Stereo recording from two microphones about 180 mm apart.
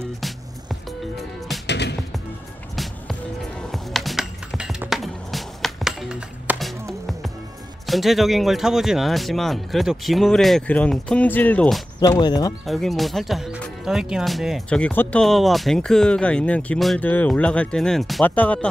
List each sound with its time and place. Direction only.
1.7 s music: 70° left (ahead or behind)
2.7 s music: centre (ahead or behind)
7.8 s speech: centre (ahead or behind)
12.0 s speech: 20° left (ahead or behind)
12.6 s speech: centre (ahead or behind)